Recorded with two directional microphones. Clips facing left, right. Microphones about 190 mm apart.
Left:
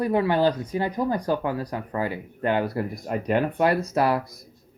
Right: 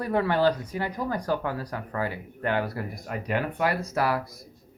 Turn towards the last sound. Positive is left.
turn(degrees=25)  # may be behind; listen again after turning